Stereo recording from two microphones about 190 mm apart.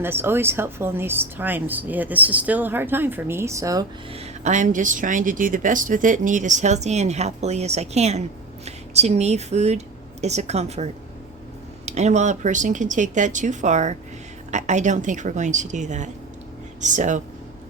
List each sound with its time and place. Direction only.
0.0 s a woman's voice: 10° right (ahead or behind)
4.1 s speech: 35° right (ahead or behind)
11.9 s speech: 35° right (ahead or behind)